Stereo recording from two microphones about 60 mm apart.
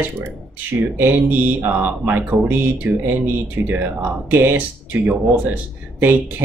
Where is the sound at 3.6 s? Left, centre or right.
Right.